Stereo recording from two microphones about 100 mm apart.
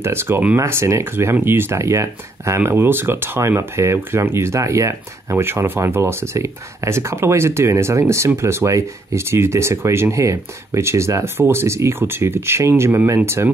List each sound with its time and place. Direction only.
0.0 s speech: 25° right (ahead or behind)